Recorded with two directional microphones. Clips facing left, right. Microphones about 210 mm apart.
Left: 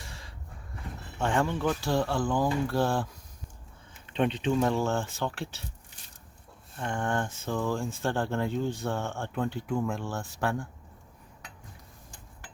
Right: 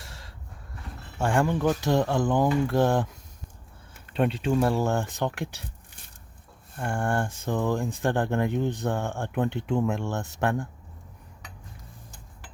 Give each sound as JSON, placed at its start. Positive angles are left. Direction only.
{"t": 1.2, "sound": "speech", "side_deg": -10}
{"t": 4.1, "sound": "speech", "side_deg": -5}
{"t": 6.7, "sound": "speech", "side_deg": -10}